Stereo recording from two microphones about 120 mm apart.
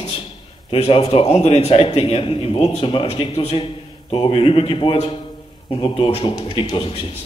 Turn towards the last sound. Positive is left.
turn(degrees=45)  # may be behind; listen again after turning